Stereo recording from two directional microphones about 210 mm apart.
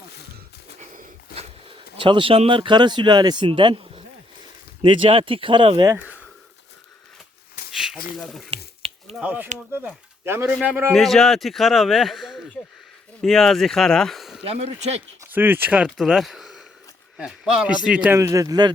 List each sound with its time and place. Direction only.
0.8 s a sound: 30° right (ahead or behind)
4.8 s speech: 25° right (ahead or behind)
7.7 s a sound: 5° right (ahead or behind)
8.1 s speech: centre (ahead or behind)
14.4 s speech: 30° right (ahead or behind)
15.2 s speech: 10° right (ahead or behind)